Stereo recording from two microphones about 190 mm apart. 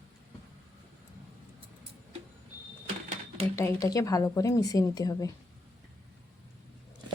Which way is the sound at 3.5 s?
15° left (ahead or behind).